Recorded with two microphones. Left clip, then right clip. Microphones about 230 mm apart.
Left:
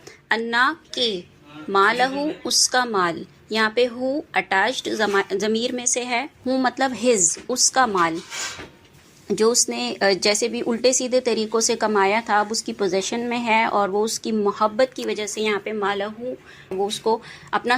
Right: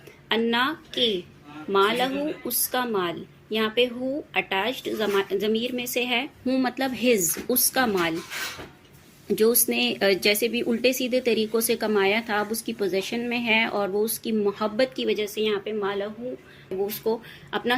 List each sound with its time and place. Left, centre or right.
0.3 s a woman's voice: left
9.2 s speech: centre